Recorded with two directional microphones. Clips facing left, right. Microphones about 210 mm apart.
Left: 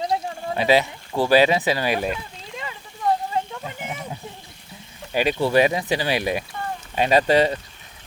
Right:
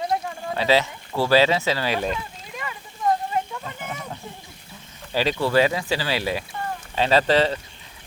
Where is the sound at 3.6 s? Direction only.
20° left (ahead or behind).